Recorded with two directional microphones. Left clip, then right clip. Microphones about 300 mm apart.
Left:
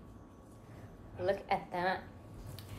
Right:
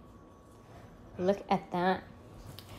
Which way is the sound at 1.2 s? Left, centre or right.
Right.